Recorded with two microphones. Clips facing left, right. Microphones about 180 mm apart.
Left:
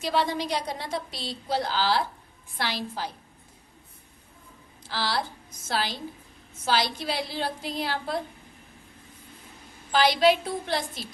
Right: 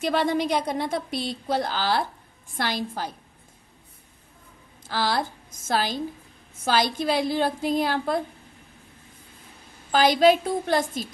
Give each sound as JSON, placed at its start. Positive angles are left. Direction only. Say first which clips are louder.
{"t": 0.0, "sound": "speech", "louder": "right 4 dB", "side_deg": -55}
{"t": 4.8, "sound": "a woman's voice", "louder": "right 4 dB", "side_deg": -50}
{"t": 9.9, "sound": "speech", "louder": "right 3 dB", "side_deg": -45}